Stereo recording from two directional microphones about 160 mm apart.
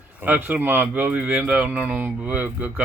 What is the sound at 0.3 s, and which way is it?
Speech, 10° right (ahead or behind).